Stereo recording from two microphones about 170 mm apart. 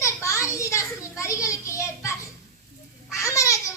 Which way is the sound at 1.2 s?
20° left (ahead or behind).